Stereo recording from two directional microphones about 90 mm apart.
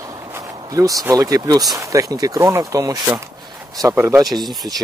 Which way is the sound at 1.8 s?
35° right (ahead or behind).